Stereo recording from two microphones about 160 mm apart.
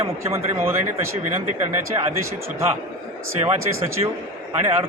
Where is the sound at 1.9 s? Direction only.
30° right (ahead or behind).